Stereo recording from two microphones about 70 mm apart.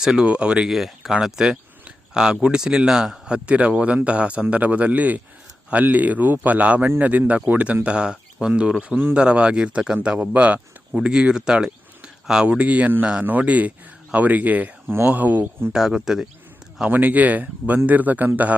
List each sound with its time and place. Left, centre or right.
0.0 s speech: centre
0.7 s speech: centre; by 15.7 s right
15.7 s speech: centre
16.9 s speech: right